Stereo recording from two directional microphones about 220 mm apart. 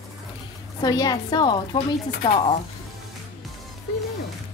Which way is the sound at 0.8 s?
15° left (ahead or behind).